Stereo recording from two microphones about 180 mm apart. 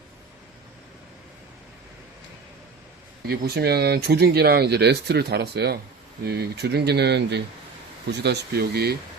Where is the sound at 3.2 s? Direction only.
60° right (ahead or behind).